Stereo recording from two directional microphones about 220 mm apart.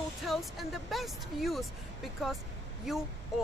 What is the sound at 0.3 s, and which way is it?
Speech, centre (ahead or behind).